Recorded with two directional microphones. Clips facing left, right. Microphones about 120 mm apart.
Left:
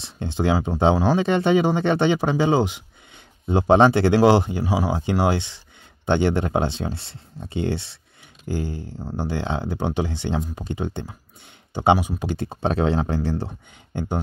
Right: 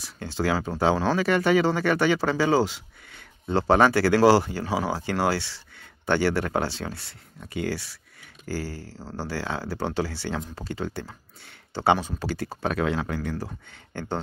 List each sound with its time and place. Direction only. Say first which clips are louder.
0.0 s speech: left 4 dB; 20° left (ahead or behind)
13.7 s speech: left 3 dB; 15° left (ahead or behind)